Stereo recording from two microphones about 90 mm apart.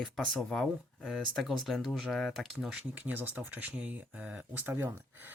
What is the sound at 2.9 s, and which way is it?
Speech, 20° right (ahead or behind).